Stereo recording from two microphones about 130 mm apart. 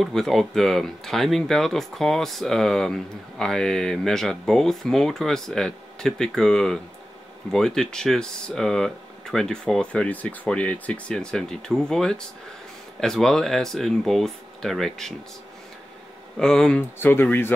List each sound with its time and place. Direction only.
0.0 s speech: centre (ahead or behind)
16.3 s speech: 5° left (ahead or behind)
17.0 s speech: 15° left (ahead or behind)